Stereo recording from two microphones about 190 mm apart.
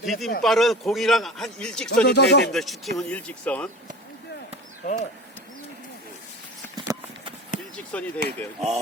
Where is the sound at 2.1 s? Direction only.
60° left (ahead or behind).